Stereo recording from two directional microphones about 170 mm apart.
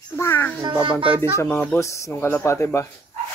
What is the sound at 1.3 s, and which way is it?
Speech, 15° left (ahead or behind).